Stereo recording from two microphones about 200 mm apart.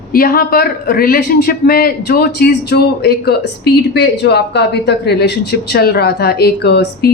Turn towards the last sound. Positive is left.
turn(degrees=55)  # may be behind; listen again after turning